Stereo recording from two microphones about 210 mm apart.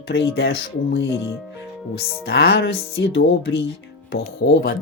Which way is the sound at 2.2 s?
60° left (ahead or behind).